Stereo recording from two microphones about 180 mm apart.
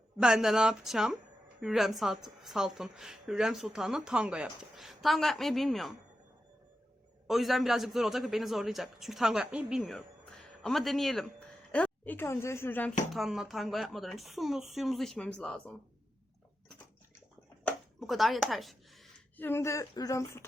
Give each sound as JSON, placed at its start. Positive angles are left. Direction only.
{"t": 0.2, "sound": "a woman's voice", "side_deg": -5}
{"t": 7.3, "sound": "a woman's voice", "side_deg": 0}
{"t": 13.1, "sound": "a woman's voice", "side_deg": 0}
{"t": 17.6, "sound": "a sound", "side_deg": 5}
{"t": 19.4, "sound": "speech", "side_deg": 15}